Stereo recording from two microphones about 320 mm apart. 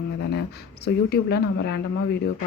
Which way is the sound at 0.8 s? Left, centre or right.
Left.